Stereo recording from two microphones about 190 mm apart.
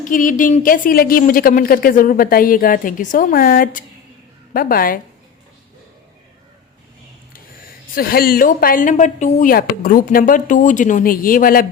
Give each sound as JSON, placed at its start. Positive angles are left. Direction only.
{"t": 0.0, "sound": "a woman's voice", "side_deg": 45}
{"t": 7.9, "sound": "a woman's voice", "side_deg": 50}